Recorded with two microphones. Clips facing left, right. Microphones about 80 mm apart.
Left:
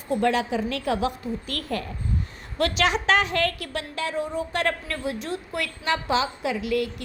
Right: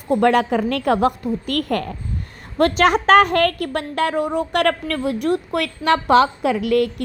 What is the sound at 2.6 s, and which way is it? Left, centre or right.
A woman's voice, right.